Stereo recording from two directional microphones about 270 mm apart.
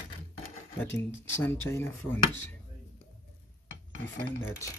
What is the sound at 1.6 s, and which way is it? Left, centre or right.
Speech, centre.